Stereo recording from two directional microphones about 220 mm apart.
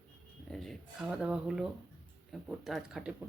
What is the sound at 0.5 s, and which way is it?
Speech, centre (ahead or behind).